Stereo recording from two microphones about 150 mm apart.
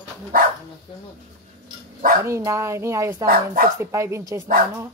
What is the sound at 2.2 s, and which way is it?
Speech, 20° right (ahead or behind).